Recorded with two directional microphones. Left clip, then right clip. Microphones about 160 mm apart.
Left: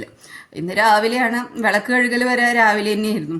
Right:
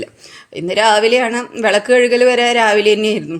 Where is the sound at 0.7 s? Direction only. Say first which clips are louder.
Right 4 dB; 20° right (ahead or behind).